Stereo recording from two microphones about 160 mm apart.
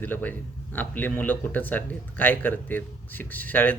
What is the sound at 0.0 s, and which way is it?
Speech, 10° left (ahead or behind).